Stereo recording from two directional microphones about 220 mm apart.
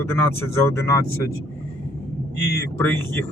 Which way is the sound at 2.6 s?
10° left (ahead or behind).